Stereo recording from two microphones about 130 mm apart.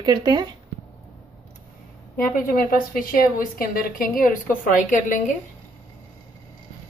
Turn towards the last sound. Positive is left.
turn(degrees=75)  # may be behind; listen again after turning